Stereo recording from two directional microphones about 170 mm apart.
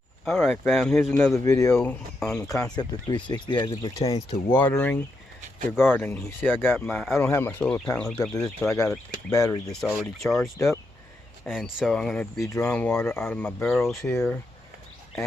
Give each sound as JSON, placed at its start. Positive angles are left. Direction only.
{"t": 0.3, "sound": "speech", "side_deg": 0}
{"t": 1.7, "sound": "speech", "side_deg": 5}
{"t": 2.5, "sound": "speech", "side_deg": 20}
{"t": 4.6, "sound": "speech", "side_deg": 10}
{"t": 7.1, "sound": "speech", "side_deg": 15}
{"t": 8.6, "sound": "speech", "side_deg": 20}
{"t": 9.8, "sound": "speech", "side_deg": 0}
{"t": 12.4, "sound": "speech", "side_deg": 15}
{"t": 14.0, "sound": "speech", "side_deg": 15}